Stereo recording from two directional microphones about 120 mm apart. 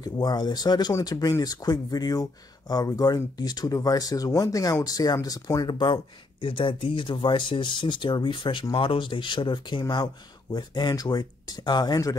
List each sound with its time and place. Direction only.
0.0 s speech: 35° left (ahead or behind)